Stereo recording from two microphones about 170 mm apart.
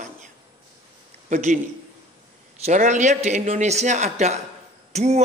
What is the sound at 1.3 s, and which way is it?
Speech, 45° right (ahead or behind).